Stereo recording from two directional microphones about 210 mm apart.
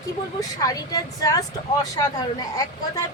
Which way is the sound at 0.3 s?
15° left (ahead or behind).